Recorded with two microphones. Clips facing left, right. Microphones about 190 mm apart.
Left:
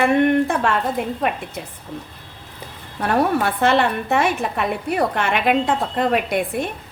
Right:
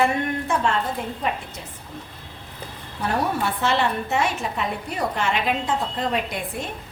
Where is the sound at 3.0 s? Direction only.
60° left (ahead or behind).